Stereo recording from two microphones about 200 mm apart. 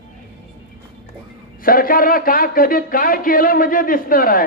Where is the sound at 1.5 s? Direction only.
45° left (ahead or behind).